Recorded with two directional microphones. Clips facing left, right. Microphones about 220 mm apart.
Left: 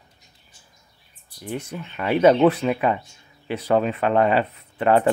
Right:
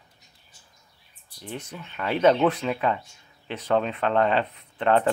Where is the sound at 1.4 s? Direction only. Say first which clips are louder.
Left 6 dB; 10° left (ahead or behind).